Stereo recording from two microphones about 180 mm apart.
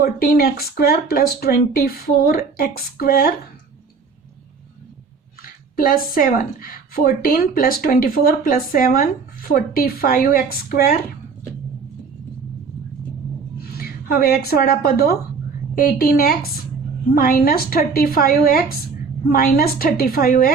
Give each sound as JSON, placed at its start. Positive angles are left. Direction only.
{"t": 0.0, "sound": "speech", "side_deg": 60}
{"t": 5.7, "sound": "speech", "side_deg": 55}
{"t": 13.7, "sound": "speech", "side_deg": 55}